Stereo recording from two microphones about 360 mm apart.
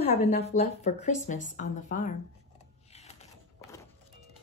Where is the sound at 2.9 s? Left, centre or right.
Centre.